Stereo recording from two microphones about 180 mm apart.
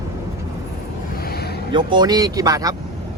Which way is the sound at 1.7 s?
25° right (ahead or behind).